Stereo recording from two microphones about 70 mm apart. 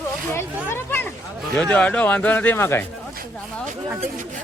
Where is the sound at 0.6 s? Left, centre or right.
Left.